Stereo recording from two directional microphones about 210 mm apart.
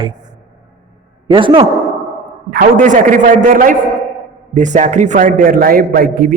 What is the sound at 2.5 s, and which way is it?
A man's voice, 40° right (ahead or behind).